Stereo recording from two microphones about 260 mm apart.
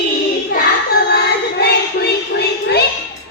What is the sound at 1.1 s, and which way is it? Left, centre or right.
Child singing, left.